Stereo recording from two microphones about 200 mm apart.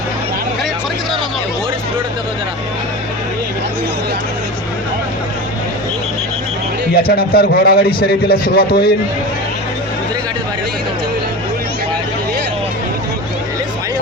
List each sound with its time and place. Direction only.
6.9 s a man's voice: 50° left (ahead or behind)